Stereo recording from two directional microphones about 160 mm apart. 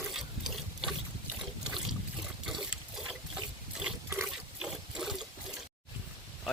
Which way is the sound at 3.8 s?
10° right (ahead or behind).